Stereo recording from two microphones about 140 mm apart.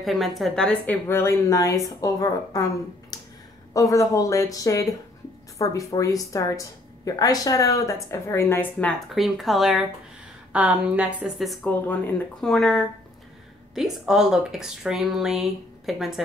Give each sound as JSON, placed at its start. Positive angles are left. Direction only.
{"t": 0.0, "sound": "speech", "side_deg": 0}
{"t": 1.0, "sound": "a woman's voice", "side_deg": 20}
{"t": 9.1, "sound": "a woman's voice", "side_deg": 0}